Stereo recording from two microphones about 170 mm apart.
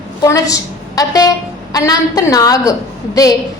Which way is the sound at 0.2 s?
20° left (ahead or behind).